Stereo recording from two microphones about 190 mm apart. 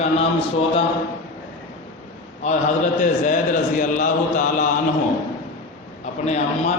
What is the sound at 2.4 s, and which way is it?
A man's voice, 40° left (ahead or behind).